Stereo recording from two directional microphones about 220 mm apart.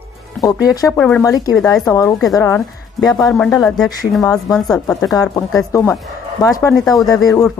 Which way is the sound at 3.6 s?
Centre (ahead or behind).